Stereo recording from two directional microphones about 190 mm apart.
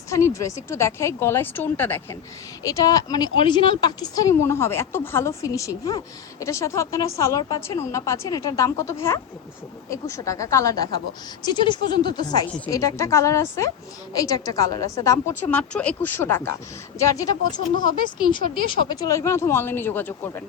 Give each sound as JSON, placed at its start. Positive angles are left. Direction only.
{"t": 0.1, "sound": "a woman's voice", "side_deg": 15}
{"t": 18.9, "sound": "a woman's voice", "side_deg": 20}